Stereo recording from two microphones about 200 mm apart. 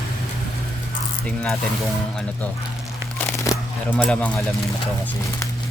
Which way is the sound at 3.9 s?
5° left (ahead or behind).